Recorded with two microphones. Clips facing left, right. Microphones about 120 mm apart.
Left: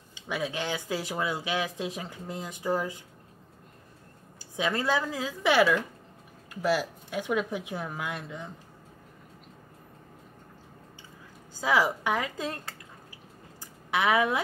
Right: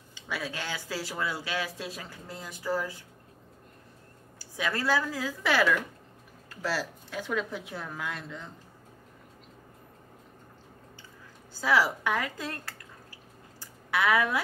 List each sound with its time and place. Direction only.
0.1 s speech: 20° left (ahead or behind)
4.4 s speech: 20° left (ahead or behind)
11.6 s speech: 15° left (ahead or behind)
13.6 s a sound: 20° left (ahead or behind)